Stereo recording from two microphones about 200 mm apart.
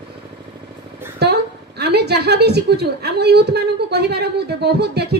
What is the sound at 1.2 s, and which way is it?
A woman's voice, 55° right (ahead or behind).